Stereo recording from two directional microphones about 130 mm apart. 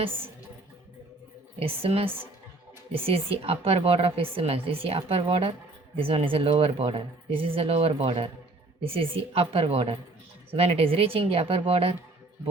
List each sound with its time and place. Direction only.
1.5 s speech: 45° right (ahead or behind)